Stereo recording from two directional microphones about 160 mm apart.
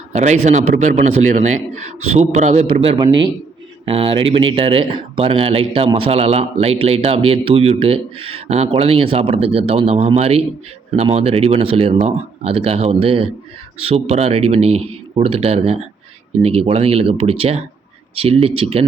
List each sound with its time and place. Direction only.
0.1 s a man's voice: 45° right (ahead or behind)